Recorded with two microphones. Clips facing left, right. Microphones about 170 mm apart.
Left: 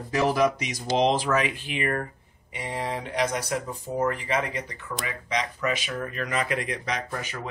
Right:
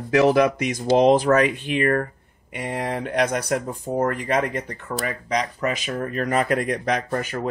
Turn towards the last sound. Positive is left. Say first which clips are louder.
# right 7 dB
turn(degrees=-50)  # may be behind; listen again after turning